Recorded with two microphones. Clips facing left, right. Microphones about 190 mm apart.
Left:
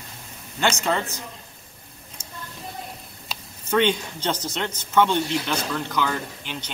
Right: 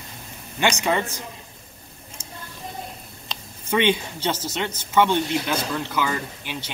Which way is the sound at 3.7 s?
10° right (ahead or behind).